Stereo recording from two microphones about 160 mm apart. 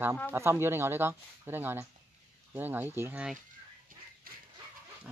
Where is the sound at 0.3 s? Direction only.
15° right (ahead or behind).